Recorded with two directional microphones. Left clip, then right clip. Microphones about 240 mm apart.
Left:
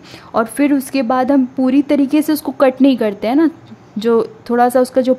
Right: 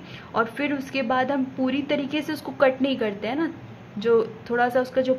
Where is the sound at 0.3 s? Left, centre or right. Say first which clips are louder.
Left 9 dB; left.